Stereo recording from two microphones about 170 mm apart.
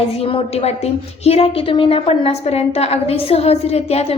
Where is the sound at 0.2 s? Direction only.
35° left (ahead or behind).